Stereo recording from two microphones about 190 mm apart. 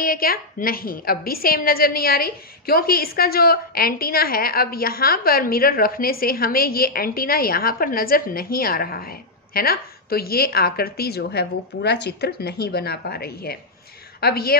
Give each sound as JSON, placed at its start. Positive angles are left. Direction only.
{"t": 0.0, "sound": "a woman's voice", "side_deg": 50}